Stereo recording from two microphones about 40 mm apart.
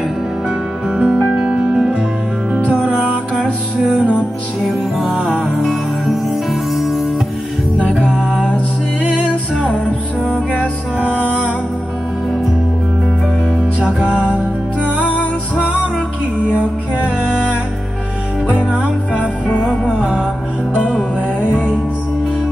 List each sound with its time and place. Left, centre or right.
0.8 s music: right
2.6 s music: right
5.4 s music: centre
8.1 s music: right
11.0 s music: right
14.0 s music: right
17.2 s music: right